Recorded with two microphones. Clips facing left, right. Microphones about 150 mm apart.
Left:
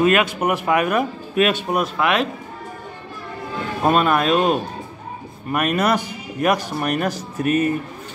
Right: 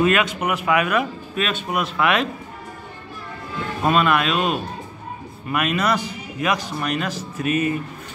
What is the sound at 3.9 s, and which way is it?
A man's voice, 40° left (ahead or behind).